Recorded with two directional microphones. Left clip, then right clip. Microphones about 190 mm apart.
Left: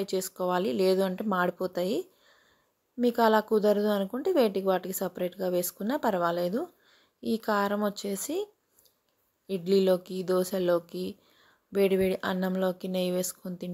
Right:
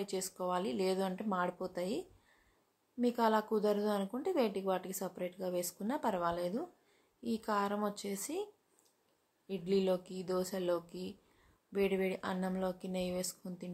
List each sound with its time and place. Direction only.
0.0 s speech: 35° left (ahead or behind)
9.5 s speech: 35° left (ahead or behind)